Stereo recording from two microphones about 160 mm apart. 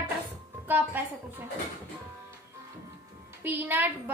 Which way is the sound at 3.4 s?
10° right (ahead or behind).